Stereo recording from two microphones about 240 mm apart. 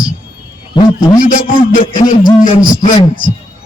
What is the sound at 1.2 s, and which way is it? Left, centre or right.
Speech, left.